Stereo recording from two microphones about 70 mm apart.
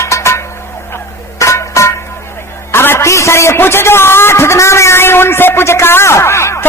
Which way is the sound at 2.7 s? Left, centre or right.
Left.